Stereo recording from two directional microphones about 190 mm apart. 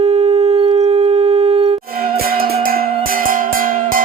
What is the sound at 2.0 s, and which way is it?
Music, 50° right (ahead or behind).